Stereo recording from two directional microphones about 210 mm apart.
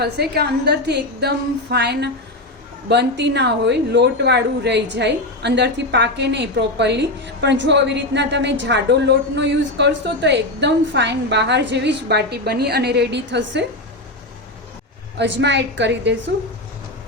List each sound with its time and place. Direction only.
0.0 s a woman's voice: 50° right (ahead or behind)
15.2 s a woman's voice: 55° right (ahead or behind)